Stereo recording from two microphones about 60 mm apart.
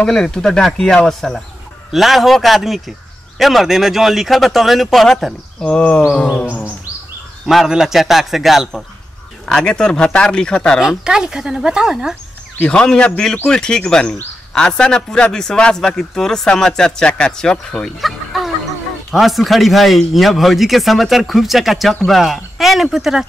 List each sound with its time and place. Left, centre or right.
0.0 s a man's voice: centre
1.9 s speech: centre
5.6 s a man's voice: centre
7.4 s speech: centre
9.5 s a man's voice: centre
10.8 s speech: centre
12.6 s a man's voice: centre
18.0 s a sound: centre
19.0 s speech: centre